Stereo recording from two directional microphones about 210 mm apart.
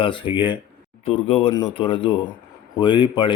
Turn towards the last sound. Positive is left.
turn(degrees=20)  # may be behind; listen again after turning